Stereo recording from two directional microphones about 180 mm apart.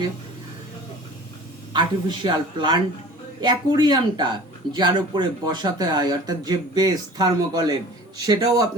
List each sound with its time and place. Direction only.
1.7 s speech: 25° right (ahead or behind)